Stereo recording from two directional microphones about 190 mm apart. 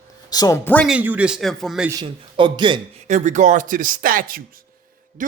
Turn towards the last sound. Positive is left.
turn(degrees=-50)  # may be behind; listen again after turning